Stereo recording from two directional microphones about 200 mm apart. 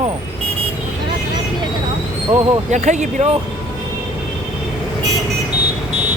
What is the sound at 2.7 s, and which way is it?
Speech, 35° right (ahead or behind).